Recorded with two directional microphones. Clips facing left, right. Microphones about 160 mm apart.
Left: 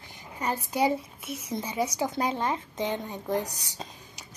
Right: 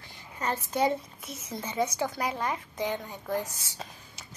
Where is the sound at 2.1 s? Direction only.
25° left (ahead or behind).